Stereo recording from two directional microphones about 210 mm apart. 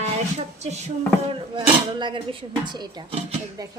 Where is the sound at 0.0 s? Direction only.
30° right (ahead or behind).